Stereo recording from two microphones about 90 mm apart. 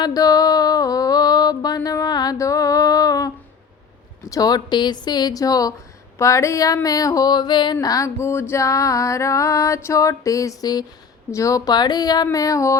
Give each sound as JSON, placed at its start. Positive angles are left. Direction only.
{"t": 0.0, "sound": "mantra", "side_deg": 45}
{"t": 4.3, "sound": "a woman's voice", "side_deg": 45}
{"t": 6.1, "sound": "music", "side_deg": 35}